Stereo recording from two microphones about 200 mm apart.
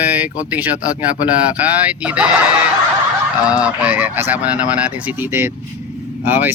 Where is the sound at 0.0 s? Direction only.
10° right (ahead or behind).